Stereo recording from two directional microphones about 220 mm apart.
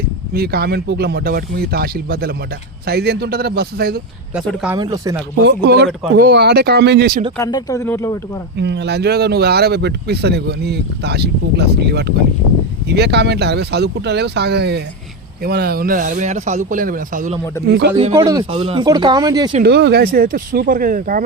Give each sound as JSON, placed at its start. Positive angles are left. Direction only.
{"t": 0.3, "sound": "speech", "side_deg": -45}
{"t": 4.4, "sound": "speech", "side_deg": -5}
{"t": 4.8, "sound": "speech", "side_deg": -15}
{"t": 5.4, "sound": "speech", "side_deg": -50}
{"t": 7.3, "sound": "speech", "side_deg": 15}
{"t": 8.5, "sound": "speech", "side_deg": -50}
{"t": 17.7, "sound": "speech", "side_deg": -50}
{"t": 18.1, "sound": "speech", "side_deg": -15}
{"t": 19.6, "sound": "speech", "side_deg": -50}